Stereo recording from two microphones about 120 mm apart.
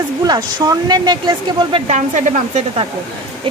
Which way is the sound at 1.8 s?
90° right.